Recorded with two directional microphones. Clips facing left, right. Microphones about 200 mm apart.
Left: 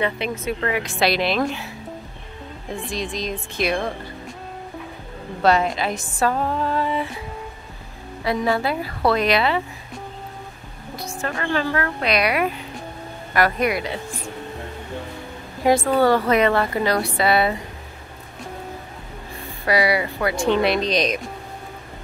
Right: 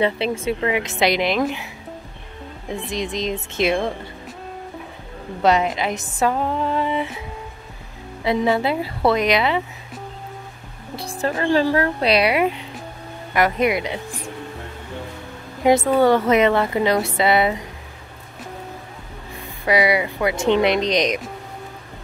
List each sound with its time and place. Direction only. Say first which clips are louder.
0.0 s speech: right 4 dB; 30° right (ahead or behind)
0.6 s a woman's voice: right 2 dB; 20° right (ahead or behind)
2.9 s speech: right 3 dB; 20° right (ahead or behind)
5.4 s speech: right 1 dB; 20° right (ahead or behind)
8.2 s speech: right 2 dB; 20° right (ahead or behind)
11.0 s a sound: right 4 dB; 35° right (ahead or behind)
11.3 s speech: right 5 dB; 35° right (ahead or behind)
15.6 s a woman's voice: right 2 dB; 20° right (ahead or behind)
19.6 s speech: right 2 dB; 20° right (ahead or behind)